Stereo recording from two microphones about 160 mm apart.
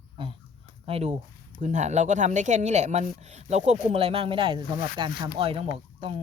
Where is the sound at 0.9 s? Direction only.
40° right (ahead or behind).